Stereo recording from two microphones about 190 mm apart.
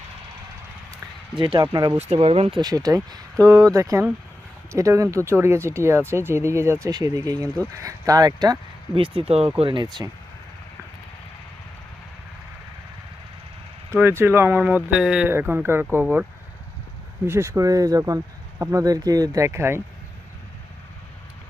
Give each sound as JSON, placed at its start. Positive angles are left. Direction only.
{"t": 1.4, "sound": "speech", "side_deg": -25}
{"t": 2.0, "sound": "speech", "side_deg": -30}
{"t": 13.9, "sound": "speech", "side_deg": -15}
{"t": 17.2, "sound": "speech", "side_deg": -15}